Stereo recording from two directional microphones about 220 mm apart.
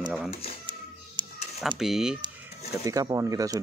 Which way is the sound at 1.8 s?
Centre (ahead or behind).